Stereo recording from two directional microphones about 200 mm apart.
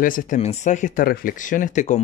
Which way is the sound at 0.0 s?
40° left (ahead or behind).